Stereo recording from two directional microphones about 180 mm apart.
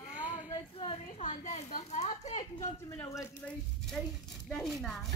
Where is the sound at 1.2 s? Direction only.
40° left (ahead or behind).